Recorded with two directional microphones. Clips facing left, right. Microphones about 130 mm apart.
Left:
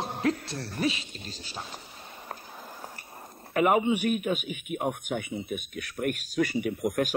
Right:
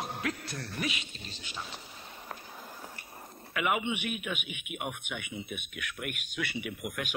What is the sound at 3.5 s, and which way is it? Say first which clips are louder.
A man's voice: left 8 dB; 40° left (ahead or behind).